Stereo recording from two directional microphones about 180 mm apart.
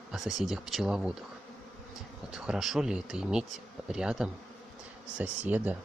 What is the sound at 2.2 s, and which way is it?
Speech, 5° right (ahead or behind).